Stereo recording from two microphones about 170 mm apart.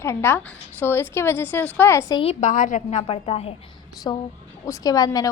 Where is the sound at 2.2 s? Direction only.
40° left (ahead or behind).